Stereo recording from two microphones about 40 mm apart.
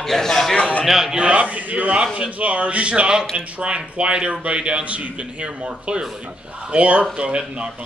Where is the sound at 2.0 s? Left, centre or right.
Right.